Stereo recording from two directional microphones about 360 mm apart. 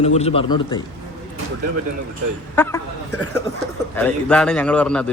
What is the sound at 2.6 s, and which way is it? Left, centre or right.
A woman's voice, centre.